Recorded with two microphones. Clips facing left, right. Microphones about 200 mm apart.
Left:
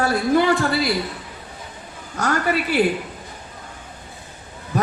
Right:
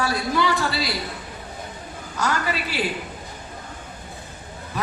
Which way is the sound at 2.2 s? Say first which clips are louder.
Left 4 dB; 55° left (ahead or behind).